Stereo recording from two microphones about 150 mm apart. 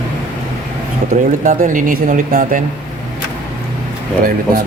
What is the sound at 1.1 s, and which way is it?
Speech, 60° right (ahead or behind).